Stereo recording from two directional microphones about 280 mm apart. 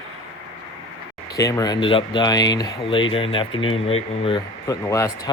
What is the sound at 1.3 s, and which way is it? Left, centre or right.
Speech, centre.